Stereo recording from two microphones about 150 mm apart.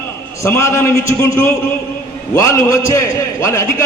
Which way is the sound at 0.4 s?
20° left (ahead or behind).